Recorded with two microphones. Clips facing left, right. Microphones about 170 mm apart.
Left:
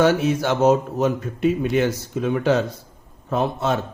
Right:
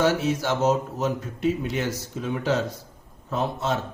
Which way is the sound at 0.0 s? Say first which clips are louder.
Left 4 dB; 55° left (ahead or behind).